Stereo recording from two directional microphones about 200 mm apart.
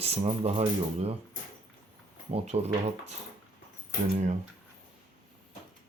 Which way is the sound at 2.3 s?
30° right (ahead or behind).